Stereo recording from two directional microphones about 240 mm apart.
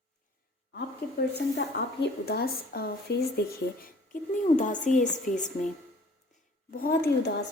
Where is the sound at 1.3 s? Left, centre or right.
Left.